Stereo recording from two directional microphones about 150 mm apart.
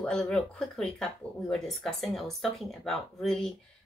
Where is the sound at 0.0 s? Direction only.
5° left (ahead or behind).